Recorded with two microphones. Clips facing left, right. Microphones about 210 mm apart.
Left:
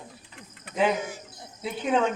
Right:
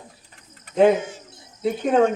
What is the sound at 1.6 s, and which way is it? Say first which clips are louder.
Speech: right 7 dB; 50° right (ahead or behind).